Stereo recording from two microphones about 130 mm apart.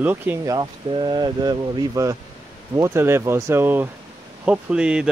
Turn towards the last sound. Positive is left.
turn(degrees=-5)  # may be behind; listen again after turning